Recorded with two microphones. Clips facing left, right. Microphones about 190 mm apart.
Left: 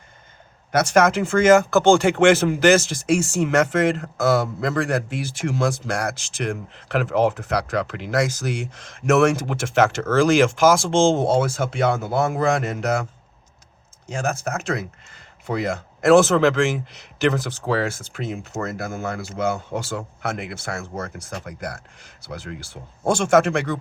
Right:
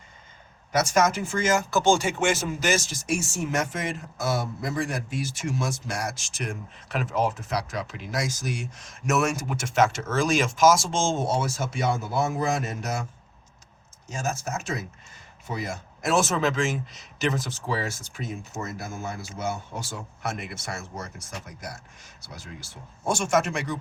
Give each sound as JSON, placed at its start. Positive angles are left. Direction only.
{"t": 0.7, "sound": "speech", "side_deg": 60}
{"t": 14.1, "sound": "speech", "side_deg": 60}
{"t": 17.2, "sound": "speech", "side_deg": 65}
{"t": 23.2, "sound": "speech", "side_deg": 60}